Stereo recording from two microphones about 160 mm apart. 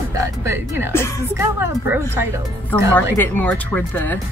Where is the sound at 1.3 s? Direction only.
15° right (ahead or behind).